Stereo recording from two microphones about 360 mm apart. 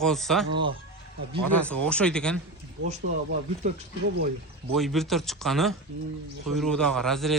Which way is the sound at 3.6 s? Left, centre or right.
Centre.